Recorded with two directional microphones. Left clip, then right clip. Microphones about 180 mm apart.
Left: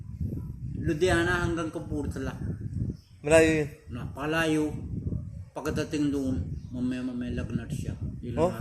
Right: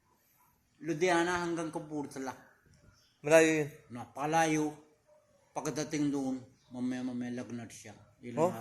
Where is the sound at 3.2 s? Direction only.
30° left (ahead or behind).